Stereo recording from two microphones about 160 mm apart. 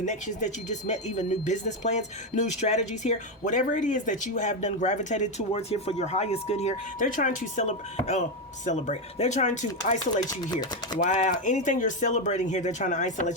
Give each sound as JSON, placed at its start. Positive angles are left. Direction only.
{"t": 0.0, "sound": "speech", "side_deg": 50}
{"t": 10.2, "sound": "chopping", "side_deg": 25}
{"t": 10.9, "sound": "speech", "side_deg": 50}